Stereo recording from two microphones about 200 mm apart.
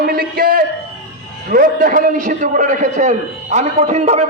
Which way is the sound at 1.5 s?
45° right (ahead or behind).